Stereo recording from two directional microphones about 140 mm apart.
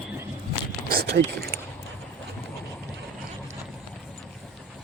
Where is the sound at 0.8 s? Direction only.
90° right.